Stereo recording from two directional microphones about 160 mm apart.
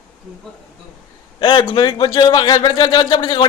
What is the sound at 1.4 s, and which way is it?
A man's voice, 30° left (ahead or behind).